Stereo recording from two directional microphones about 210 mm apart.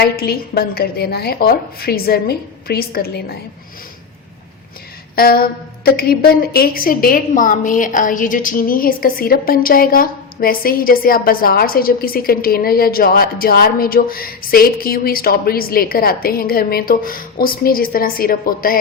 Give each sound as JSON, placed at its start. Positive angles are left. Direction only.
{"t": 0.0, "sound": "a woman's voice", "side_deg": 50}
{"t": 5.1, "sound": "a woman's voice", "side_deg": 45}